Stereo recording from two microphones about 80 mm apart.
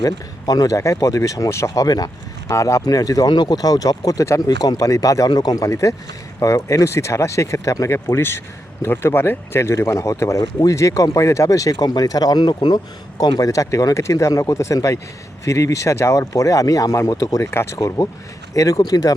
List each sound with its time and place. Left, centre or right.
0.0 s speech: left
2.5 s speech: left
17.7 s speech: left